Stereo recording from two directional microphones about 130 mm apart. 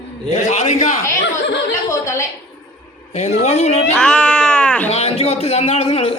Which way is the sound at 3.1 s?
60° left (ahead or behind).